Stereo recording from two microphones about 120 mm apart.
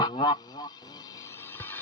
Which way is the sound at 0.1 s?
40° left (ahead or behind).